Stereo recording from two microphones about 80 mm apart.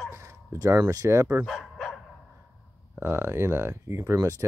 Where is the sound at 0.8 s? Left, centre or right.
Right.